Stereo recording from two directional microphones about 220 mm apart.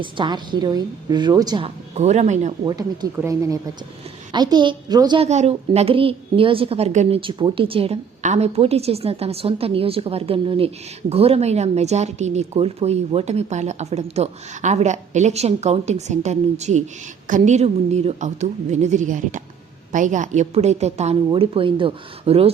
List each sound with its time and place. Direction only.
0.0 s a woman's voice: 20° right (ahead or behind)
2.6 s a woman's voice: 15° right (ahead or behind)